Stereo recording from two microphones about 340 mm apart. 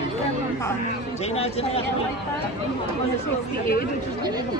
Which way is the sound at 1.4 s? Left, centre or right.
Centre.